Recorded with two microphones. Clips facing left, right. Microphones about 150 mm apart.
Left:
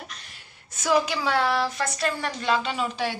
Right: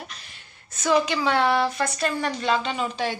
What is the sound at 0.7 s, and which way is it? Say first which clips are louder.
A woman's voice: right 1 dB; 10° left (ahead or behind).